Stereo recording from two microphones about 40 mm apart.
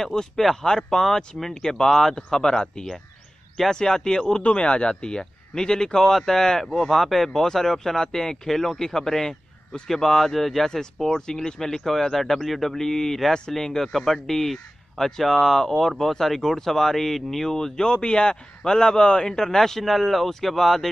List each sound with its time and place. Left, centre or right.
0.0 s speech: centre
4.4 s speech: left; by 20.9 s centre